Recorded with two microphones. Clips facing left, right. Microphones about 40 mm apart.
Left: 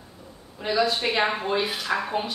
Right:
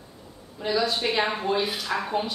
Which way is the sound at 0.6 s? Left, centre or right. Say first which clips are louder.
Left 1 dB; centre.